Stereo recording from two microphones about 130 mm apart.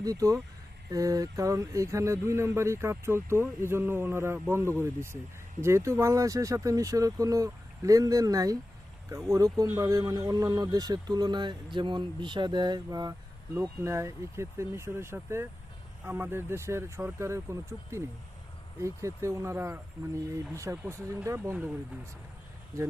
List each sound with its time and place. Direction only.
0.0 s a man's voice: 25° right (ahead or behind)
22.7 s a man's voice: 25° right (ahead or behind)